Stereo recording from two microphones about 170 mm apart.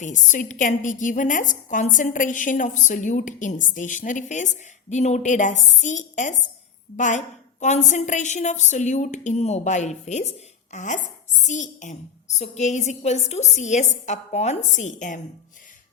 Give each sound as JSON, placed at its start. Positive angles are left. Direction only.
{"t": 0.0, "sound": "a woman's voice", "side_deg": 45}